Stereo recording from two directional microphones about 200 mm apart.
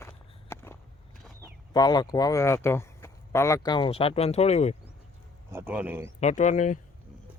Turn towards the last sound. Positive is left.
turn(degrees=40)  # may be behind; listen again after turning